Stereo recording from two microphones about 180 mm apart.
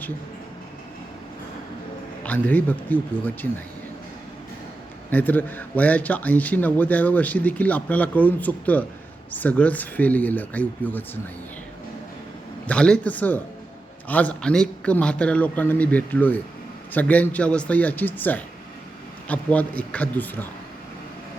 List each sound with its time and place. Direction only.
2.2 s speech: 10° left (ahead or behind)
5.1 s speech: 10° left (ahead or behind)
12.6 s speech: 5° left (ahead or behind)